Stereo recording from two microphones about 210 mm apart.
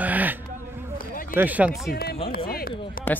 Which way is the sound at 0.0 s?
10° right (ahead or behind).